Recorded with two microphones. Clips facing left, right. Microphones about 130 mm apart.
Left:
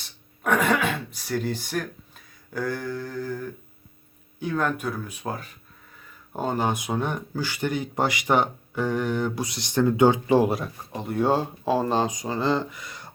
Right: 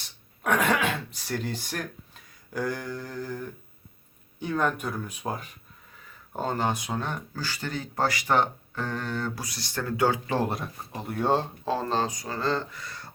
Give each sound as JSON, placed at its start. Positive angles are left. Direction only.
{"t": 0.4, "sound": "speech", "side_deg": 5}
{"t": 2.5, "sound": "mantra", "side_deg": -5}
{"t": 3.2, "sound": "a sound", "side_deg": 0}
{"t": 4.4, "sound": "speech", "side_deg": 5}
{"t": 5.2, "sound": "a sound", "side_deg": -5}
{"t": 6.3, "sound": "speech", "side_deg": 10}
{"t": 10.5, "sound": "speech", "side_deg": 0}